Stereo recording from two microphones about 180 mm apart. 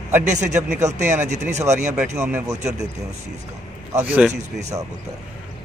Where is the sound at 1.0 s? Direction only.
40° right (ahead or behind).